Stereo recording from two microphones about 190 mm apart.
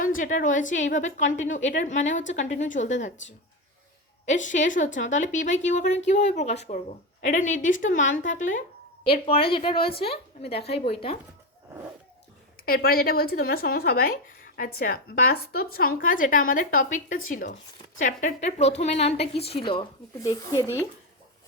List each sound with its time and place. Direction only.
0.0 s a woman's voice: 45° left (ahead or behind)
4.3 s a woman's voice: 40° left (ahead or behind)
9.2 s a woman's voice: 30° left (ahead or behind)
12.6 s a woman's voice: 50° left (ahead or behind); by 19.5 s 30° left (ahead or behind)
20.1 s speech: 20° left (ahead or behind)